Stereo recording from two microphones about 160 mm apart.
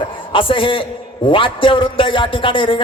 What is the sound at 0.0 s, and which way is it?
A man's voice, 35° left (ahead or behind).